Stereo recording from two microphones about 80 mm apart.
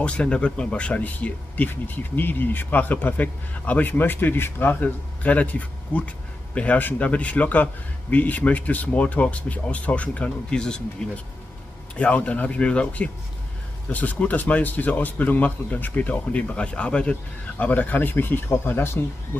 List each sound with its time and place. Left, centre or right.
0.0 s speech: centre; by 19.0 s left